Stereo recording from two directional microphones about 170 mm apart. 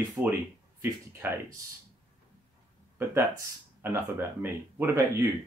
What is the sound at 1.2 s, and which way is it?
Speech, 10° right (ahead or behind).